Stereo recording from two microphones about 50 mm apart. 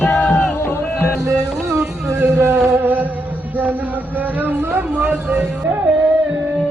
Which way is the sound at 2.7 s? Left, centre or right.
Right.